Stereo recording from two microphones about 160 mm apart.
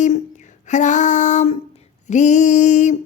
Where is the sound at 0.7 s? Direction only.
50° left (ahead or behind).